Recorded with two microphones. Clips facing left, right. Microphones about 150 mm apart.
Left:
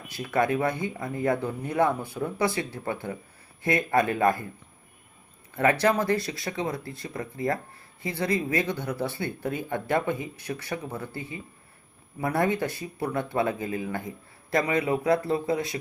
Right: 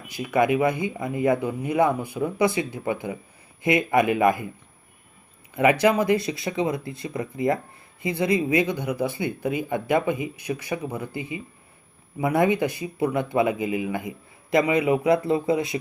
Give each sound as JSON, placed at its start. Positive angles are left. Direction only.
{"t": 0.1, "sound": "speech", "side_deg": -15}
{"t": 5.5, "sound": "speech", "side_deg": -15}